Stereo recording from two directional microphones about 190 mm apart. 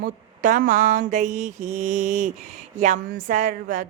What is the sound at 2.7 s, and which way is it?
Speech, 40° right (ahead or behind).